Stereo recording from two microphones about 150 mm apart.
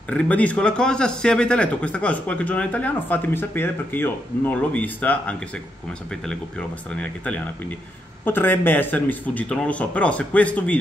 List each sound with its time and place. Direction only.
0.1 s a man's voice: 10° left (ahead or behind)
7.0 s a man's voice: 10° left (ahead or behind)